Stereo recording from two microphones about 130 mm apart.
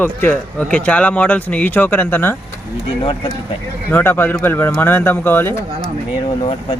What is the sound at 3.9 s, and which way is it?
Speech, 15° left (ahead or behind).